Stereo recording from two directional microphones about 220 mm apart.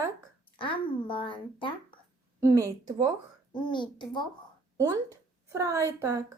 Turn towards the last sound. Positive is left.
turn(degrees=-15)  # may be behind; listen again after turning